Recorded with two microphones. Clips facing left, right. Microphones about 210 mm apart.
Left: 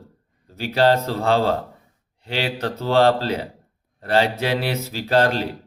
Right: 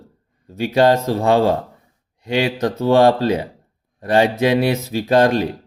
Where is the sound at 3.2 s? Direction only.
15° right (ahead or behind).